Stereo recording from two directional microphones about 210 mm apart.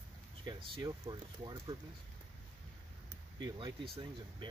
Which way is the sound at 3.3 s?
20° right (ahead or behind).